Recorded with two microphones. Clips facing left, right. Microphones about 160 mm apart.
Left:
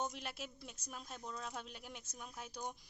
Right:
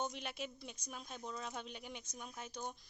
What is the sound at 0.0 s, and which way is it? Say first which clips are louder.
A woman's voice: right 1 dB; centre (ahead or behind).